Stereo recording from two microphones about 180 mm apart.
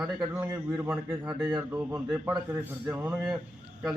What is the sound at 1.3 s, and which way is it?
Speech, 25° right (ahead or behind).